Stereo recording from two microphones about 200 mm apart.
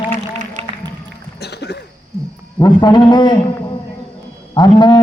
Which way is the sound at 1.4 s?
55° left (ahead or behind).